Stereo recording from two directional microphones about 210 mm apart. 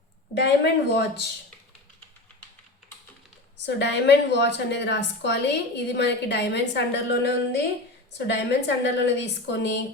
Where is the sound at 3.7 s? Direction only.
55° left (ahead or behind).